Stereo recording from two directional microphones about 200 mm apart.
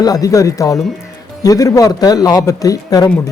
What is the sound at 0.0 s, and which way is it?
A man's voice, 20° left (ahead or behind).